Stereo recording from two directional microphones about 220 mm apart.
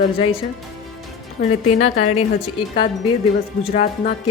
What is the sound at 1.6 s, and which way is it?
Speech, 35° left (ahead or behind).